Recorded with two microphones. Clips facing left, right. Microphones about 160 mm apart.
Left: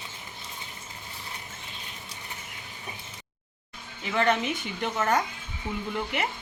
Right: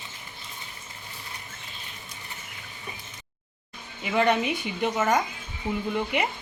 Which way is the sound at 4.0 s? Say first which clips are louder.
Right 2 dB; 10° right (ahead or behind).